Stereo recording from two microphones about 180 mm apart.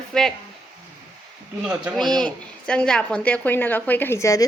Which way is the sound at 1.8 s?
Centre (ahead or behind).